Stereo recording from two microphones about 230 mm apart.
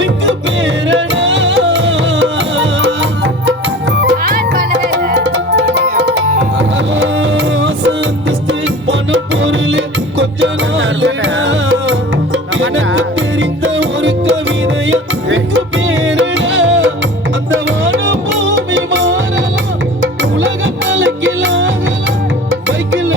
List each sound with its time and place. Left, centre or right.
0.0 s music: right
4.2 s music: right